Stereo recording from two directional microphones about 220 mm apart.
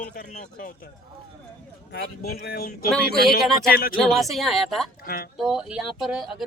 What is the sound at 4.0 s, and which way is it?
Speech, centre (ahead or behind).